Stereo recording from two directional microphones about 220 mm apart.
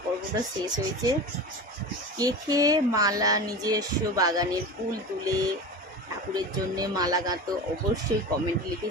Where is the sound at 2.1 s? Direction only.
15° right (ahead or behind).